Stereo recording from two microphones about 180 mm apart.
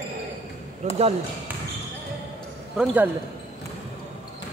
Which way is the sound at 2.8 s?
5° right (ahead or behind).